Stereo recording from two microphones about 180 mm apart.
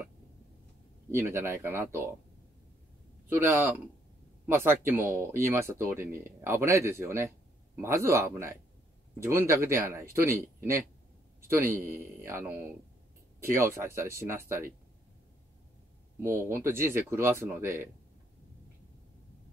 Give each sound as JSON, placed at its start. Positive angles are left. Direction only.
{"t": 1.1, "sound": "speech", "side_deg": -15}
{"t": 3.3, "sound": "speech", "side_deg": -10}
{"t": 16.2, "sound": "speech", "side_deg": -15}